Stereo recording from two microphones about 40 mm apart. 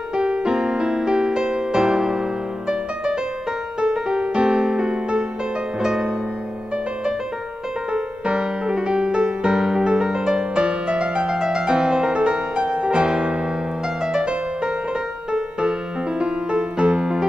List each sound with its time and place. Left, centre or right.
0.2 s music: right
3.8 s music: right
7.9 s music: right
16.2 s music: right